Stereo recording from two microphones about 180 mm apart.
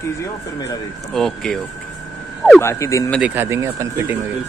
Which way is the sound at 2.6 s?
15° left (ahead or behind).